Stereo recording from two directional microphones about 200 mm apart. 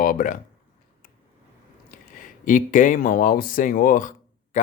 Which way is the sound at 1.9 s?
45° left (ahead or behind).